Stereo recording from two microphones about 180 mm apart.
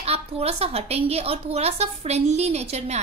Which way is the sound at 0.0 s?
35° right (ahead or behind).